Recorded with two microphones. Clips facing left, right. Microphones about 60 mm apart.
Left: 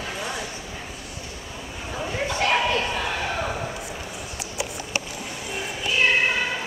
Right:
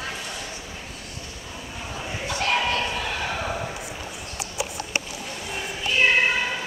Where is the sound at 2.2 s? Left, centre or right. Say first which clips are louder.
Left 1 dB; centre.